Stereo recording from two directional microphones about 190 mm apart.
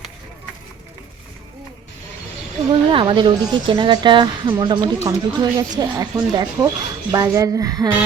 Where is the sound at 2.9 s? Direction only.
25° right (ahead or behind).